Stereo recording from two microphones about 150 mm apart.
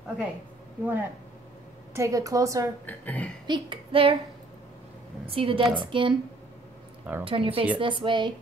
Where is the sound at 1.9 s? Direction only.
20° right (ahead or behind).